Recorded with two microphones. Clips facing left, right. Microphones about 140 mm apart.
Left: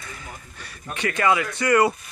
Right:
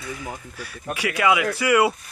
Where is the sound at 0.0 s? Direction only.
5° right (ahead or behind).